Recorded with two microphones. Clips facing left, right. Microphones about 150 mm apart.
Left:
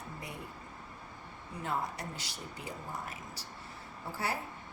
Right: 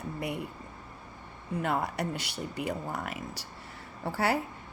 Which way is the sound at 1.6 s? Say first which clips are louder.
Right 5 dB; 70° right (ahead or behind).